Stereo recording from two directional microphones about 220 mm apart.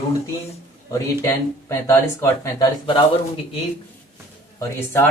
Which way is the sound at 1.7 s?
15° left (ahead or behind).